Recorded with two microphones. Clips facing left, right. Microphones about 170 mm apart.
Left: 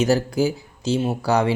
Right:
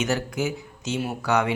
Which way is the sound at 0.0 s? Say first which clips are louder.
Left 6 dB; 35° left (ahead or behind).